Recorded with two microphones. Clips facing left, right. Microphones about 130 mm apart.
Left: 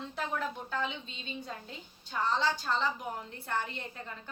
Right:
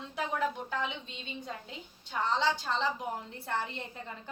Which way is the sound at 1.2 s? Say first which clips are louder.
Left 1 dB; 20° right (ahead or behind).